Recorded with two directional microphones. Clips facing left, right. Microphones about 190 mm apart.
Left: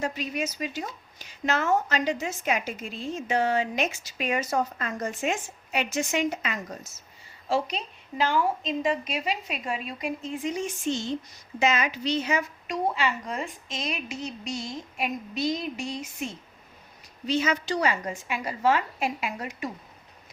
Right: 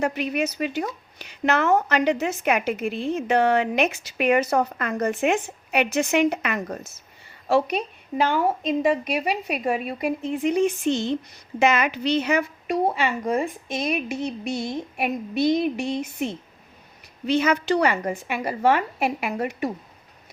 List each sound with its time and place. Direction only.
0.0 s speech: 60° right (ahead or behind)